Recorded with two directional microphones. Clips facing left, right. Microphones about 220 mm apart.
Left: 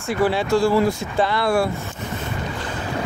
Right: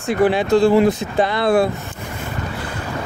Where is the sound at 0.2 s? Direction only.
20° right (ahead or behind).